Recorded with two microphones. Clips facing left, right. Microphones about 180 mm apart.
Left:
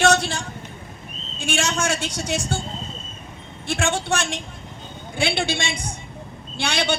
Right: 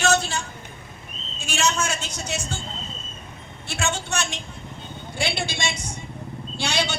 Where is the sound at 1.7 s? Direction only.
90° left.